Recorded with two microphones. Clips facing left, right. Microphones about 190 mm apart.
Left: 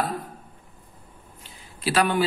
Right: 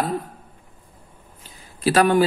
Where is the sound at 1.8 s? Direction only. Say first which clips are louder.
Right 6 dB; 45° right (ahead or behind).